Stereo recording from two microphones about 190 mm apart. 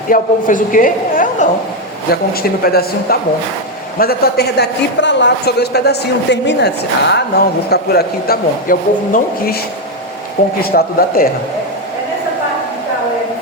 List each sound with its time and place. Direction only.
0.1 s a man's voice: 45° left (ahead or behind)
10.6 s speech: 55° left (ahead or behind)